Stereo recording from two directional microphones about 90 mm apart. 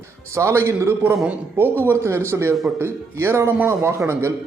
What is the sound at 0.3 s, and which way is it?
A man's voice, 30° right (ahead or behind).